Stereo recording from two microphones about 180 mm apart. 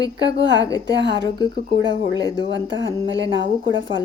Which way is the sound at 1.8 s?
80° right.